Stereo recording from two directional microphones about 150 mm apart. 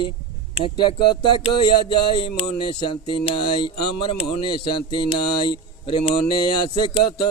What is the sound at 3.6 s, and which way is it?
Speech, 35° left (ahead or behind).